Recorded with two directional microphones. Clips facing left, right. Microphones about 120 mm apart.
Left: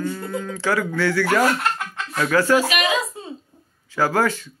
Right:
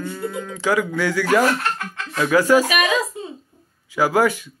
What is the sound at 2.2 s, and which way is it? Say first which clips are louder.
Speech: right 3 dB; 15° right (ahead or behind).